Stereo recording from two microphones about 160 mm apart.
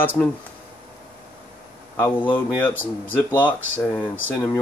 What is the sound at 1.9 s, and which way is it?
Speech, 15° left (ahead or behind).